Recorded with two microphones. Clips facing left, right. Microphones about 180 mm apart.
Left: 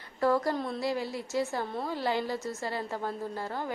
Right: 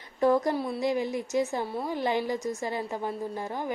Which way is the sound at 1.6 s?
10° right (ahead or behind).